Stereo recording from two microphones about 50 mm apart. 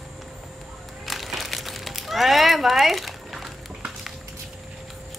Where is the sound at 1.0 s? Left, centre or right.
Centre.